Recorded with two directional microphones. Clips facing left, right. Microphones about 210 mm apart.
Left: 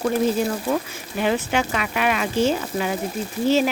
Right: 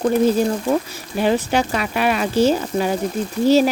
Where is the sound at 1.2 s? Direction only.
35° right (ahead or behind).